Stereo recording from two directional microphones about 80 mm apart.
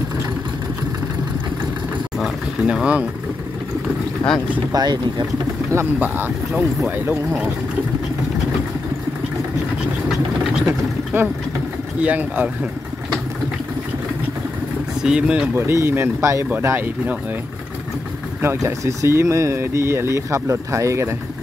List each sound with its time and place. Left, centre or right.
2.6 s speech: centre
4.7 s speech: right
5.9 s speech: right
11.1 s speech: right
15.0 s speech: centre
15.5 s speech: right
16.6 s speech: right
18.4 s speech: right